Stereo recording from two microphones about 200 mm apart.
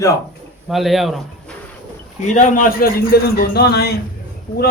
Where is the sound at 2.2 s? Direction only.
35° left (ahead or behind); by 3.9 s 55° left (ahead or behind).